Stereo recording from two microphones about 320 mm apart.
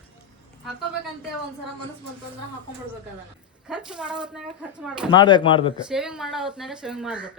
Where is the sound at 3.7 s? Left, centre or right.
Centre.